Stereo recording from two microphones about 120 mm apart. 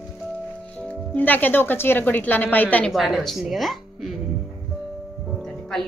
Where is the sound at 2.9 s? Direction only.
Centre (ahead or behind).